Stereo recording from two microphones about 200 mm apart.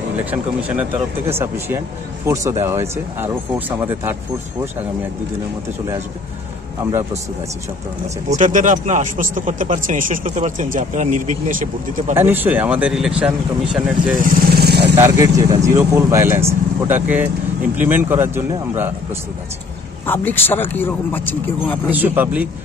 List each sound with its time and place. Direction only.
0.2 s speech: 10° right (ahead or behind)
6.8 s speech: 15° right (ahead or behind)
8.3 s speech: 40° right (ahead or behind)
12.1 s speech: 10° right (ahead or behind)
14.2 s speech: 55° right (ahead or behind)
15.0 s speech: 15° right (ahead or behind)
20.1 s speech: 10° left (ahead or behind)
21.9 s speech: 10° right (ahead or behind)